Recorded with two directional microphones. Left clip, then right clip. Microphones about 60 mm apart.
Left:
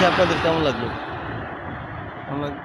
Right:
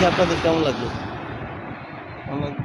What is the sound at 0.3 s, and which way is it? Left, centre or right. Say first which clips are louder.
Speech: even; left.